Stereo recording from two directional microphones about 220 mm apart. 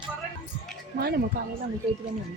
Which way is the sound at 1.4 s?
40° right (ahead or behind).